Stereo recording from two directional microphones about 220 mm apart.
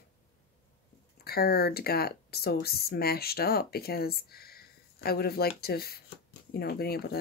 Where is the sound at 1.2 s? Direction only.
45° left (ahead or behind).